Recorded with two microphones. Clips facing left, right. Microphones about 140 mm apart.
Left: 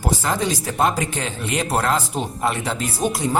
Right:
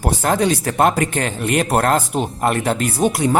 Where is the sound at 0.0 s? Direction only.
60° right (ahead or behind).